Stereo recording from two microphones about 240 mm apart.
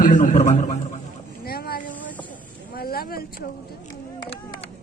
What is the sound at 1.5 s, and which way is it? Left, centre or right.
Vehicle, left.